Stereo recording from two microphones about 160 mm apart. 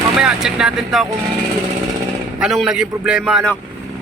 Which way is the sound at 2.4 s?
5° right (ahead or behind).